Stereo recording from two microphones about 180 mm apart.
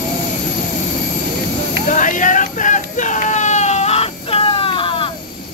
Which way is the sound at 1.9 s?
45° left (ahead or behind).